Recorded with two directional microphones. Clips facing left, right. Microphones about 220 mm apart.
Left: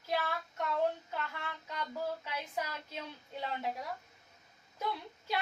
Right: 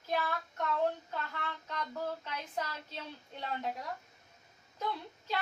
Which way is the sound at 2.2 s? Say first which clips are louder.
Even; 10° left (ahead or behind).